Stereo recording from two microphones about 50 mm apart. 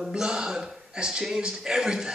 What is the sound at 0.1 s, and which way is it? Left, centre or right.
A woman's voice, centre.